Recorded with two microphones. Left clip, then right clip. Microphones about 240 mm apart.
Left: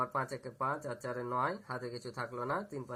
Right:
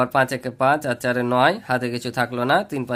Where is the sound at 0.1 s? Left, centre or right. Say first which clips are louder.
Right 17 dB; right.